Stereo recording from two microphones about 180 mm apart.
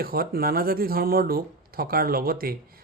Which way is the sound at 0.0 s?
55° right (ahead or behind).